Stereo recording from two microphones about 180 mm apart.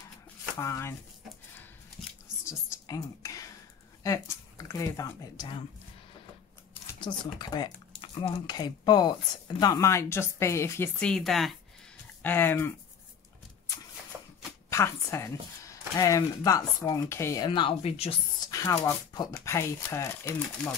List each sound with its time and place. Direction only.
0.6 s speech: 15° left (ahead or behind)
2.4 s whispering: 20° left (ahead or behind)
4.7 s speech: 15° left (ahead or behind)
7.3 s speech: 25° left (ahead or behind); by 11.5 s centre (ahead or behind)
12.2 s speech: 10° left (ahead or behind)
14.1 s a sound: 15° right (ahead or behind)
14.7 s speech: 15° left (ahead or behind)
17.5 s speech: 30° left (ahead or behind)
18.5 s speech: 15° left (ahead or behind)